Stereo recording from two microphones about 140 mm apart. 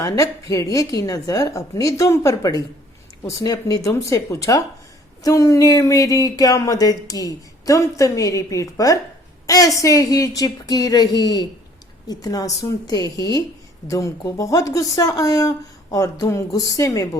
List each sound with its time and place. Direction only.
0.0 s speech: 25° left (ahead or behind)